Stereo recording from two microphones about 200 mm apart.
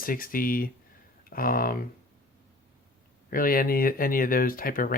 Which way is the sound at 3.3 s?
45° left (ahead or behind).